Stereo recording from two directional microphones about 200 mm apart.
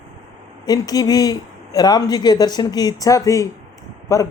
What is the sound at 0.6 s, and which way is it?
Speech, 20° left (ahead or behind).